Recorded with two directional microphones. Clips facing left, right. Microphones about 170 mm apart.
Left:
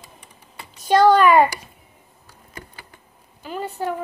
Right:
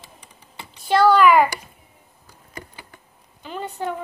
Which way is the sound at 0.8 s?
20° left (ahead or behind).